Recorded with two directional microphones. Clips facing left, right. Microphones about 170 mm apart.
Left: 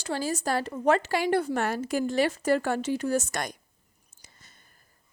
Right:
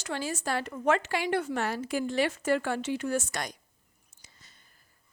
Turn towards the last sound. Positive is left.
turn(degrees=50)  # may be behind; listen again after turning